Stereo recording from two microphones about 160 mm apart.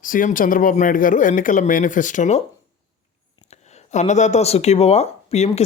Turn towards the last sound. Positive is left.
turn(degrees=45)  # may be behind; listen again after turning